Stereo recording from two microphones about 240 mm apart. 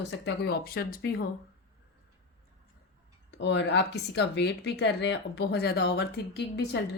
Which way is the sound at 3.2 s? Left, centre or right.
Left.